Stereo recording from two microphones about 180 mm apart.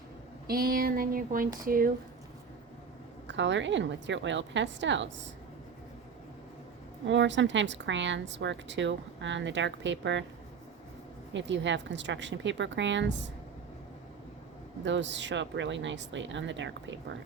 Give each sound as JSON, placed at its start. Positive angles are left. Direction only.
{"t": 0.4, "sound": "a sound", "side_deg": -55}
{"t": 3.2, "sound": "a woman's voice", "side_deg": -85}
{"t": 7.1, "sound": "a woman's voice", "side_deg": -85}
{"t": 11.3, "sound": "a woman's voice", "side_deg": -90}
{"t": 14.8, "sound": "a woman's voice", "side_deg": -90}